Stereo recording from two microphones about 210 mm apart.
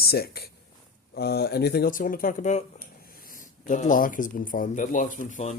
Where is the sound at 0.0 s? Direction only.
50° left (ahead or behind).